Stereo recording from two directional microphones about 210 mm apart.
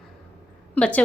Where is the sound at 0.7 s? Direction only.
5° left (ahead or behind).